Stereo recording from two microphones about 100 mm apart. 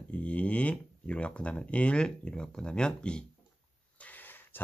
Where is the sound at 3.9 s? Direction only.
15° left (ahead or behind).